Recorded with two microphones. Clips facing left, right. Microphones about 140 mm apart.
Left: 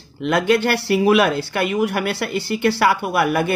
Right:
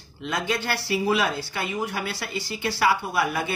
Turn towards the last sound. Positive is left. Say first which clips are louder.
# left 7 dB
turn(degrees=60)  # may be behind; listen again after turning